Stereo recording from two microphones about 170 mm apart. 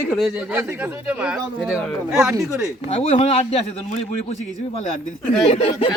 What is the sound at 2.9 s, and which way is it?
A man's voice, 40° left (ahead or behind).